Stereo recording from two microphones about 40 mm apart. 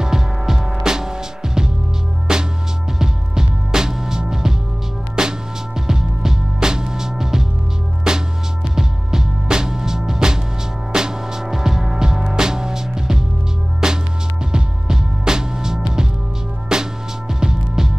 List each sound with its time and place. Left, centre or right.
0.0 s music: centre